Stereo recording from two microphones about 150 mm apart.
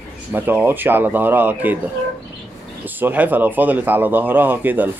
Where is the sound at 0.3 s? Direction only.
15° right (ahead or behind).